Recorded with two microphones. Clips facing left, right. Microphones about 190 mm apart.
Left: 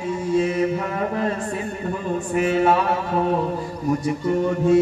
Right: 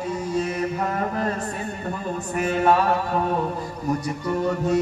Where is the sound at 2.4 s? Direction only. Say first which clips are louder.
Left 2 dB; 40° right (ahead or behind).